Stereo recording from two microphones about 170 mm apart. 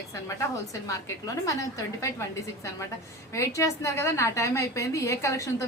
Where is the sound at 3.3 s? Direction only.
20° left (ahead or behind).